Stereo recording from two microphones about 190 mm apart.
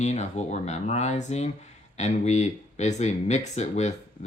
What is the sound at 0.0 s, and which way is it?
Speech, 35° left (ahead or behind).